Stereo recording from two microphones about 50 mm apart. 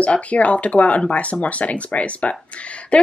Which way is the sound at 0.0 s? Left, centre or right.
Left.